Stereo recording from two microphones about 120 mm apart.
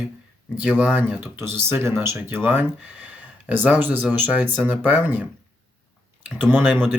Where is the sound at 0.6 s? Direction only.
10° right (ahead or behind).